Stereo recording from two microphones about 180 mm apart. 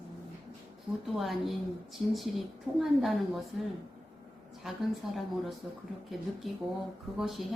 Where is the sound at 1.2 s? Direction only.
Centre (ahead or behind).